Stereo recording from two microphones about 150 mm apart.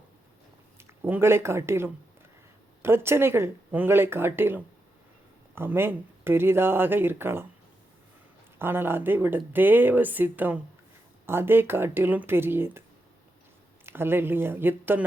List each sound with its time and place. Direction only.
0.8 s speech: 15° right (ahead or behind)
8.5 s speech: 15° right (ahead or behind)
13.8 s speech: 15° right (ahead or behind)